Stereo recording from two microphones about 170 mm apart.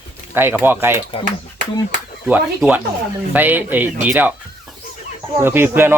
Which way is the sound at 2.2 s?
10° right (ahead or behind).